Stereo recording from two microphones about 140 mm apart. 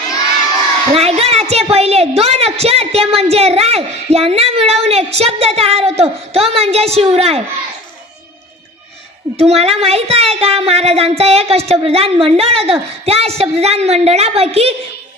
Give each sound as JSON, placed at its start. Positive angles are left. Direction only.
{"t": 0.9, "sound": "a woman's voice", "side_deg": -45}
{"t": 9.4, "sound": "a woman's voice", "side_deg": -45}